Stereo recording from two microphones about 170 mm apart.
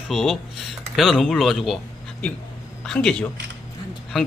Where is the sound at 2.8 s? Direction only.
5° left (ahead or behind).